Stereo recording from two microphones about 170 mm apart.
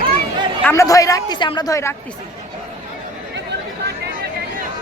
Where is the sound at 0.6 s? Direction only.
10° left (ahead or behind).